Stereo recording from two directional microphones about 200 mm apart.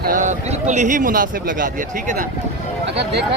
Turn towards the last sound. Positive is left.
turn(degrees=-60)  # may be behind; listen again after turning